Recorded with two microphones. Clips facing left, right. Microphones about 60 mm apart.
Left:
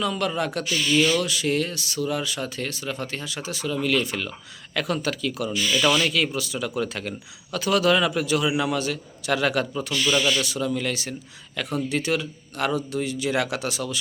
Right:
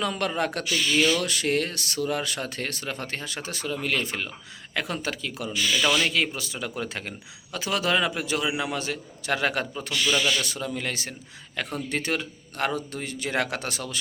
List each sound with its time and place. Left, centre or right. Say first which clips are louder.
0.0 s a man's voice: left 1 dB; right
4.7 s a man's voice: left 4 dB; right
5.7 s speech: left 3 dB; left
6.0 s a man's voice: left 2 dB; right
10.2 s speech: left 3 dB; left
10.4 s a man's voice: left 5 dB; right